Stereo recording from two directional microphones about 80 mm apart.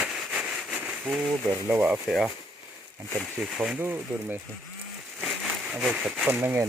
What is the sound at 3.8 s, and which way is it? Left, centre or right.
Speech, right.